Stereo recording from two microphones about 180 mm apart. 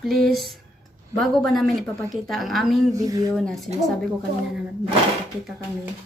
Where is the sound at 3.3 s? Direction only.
Centre (ahead or behind).